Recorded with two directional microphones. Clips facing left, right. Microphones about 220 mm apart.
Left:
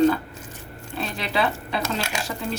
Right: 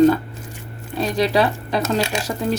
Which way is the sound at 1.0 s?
40° right (ahead or behind).